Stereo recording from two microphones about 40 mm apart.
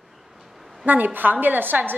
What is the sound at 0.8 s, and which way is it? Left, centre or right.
A woman's voice, right.